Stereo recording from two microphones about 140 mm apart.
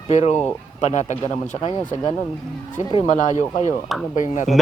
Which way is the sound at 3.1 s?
60° left (ahead or behind).